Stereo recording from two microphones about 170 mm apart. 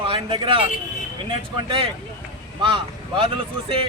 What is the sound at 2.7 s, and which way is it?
A man's voice, 30° right (ahead or behind).